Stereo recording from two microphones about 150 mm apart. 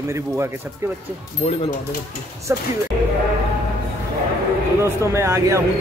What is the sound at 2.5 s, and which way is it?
Speech, 20° right (ahead or behind).